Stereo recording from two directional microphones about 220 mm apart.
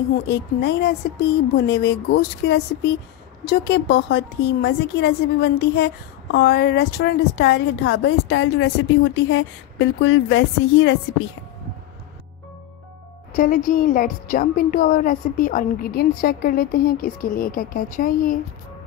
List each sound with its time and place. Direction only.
0.3 s a woman's voice: 50° left (ahead or behind)
13.3 s a woman's voice: 35° left (ahead or behind)